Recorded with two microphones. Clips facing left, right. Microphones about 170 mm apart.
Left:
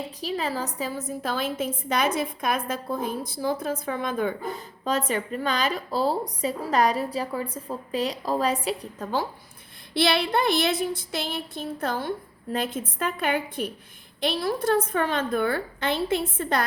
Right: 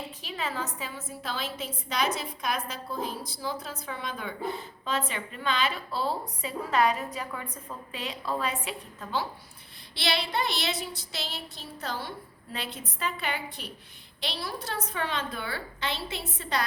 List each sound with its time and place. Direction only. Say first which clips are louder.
0.2 s a woman's voice: left 6 dB; 35° left (ahead or behind)
9.9 s a woman's voice: left 7 dB; 55° left (ahead or behind)